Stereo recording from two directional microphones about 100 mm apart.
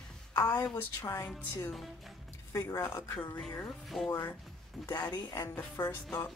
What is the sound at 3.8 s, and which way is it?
Speech, 5° left (ahead or behind).